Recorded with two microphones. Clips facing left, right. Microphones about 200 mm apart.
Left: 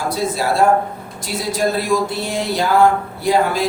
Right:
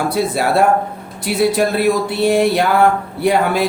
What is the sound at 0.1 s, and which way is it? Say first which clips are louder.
Speech: right 3 dB; 60° right (ahead or behind).